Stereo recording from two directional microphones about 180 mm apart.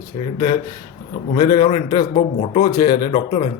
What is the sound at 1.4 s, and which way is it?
Speech, 25° left (ahead or behind).